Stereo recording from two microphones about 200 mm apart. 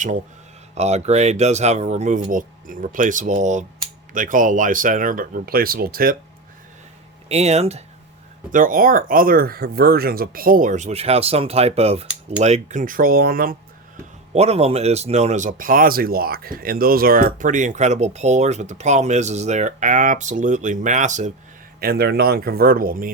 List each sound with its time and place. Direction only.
0.8 s speech: 35° right (ahead or behind)
7.3 s speech: 30° right (ahead or behind)
8.5 s speech: 45° right (ahead or behind)
14.3 s speech: 30° right (ahead or behind)
21.8 s speech: 50° right (ahead or behind)